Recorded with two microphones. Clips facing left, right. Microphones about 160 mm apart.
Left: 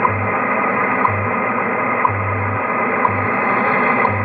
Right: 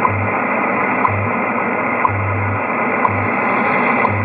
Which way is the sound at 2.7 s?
20° right (ahead or behind).